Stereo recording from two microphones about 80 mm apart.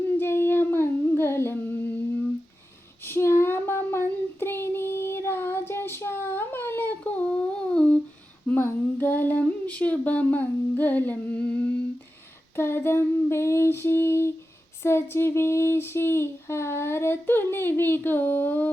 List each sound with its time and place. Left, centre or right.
0.2 s humming: left
3.0 s child singing: left
7.0 s humming: centre
8.4 s a sound: left
12.5 s female singing: left
14.8 s a sound: left